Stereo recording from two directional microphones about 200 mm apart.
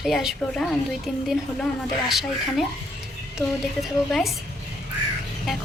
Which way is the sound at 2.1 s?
Centre (ahead or behind).